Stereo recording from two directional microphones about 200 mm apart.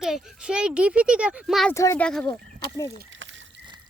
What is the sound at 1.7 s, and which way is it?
Speech, 15° left (ahead or behind).